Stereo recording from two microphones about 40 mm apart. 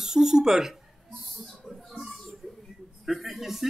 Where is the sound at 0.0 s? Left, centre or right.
Centre.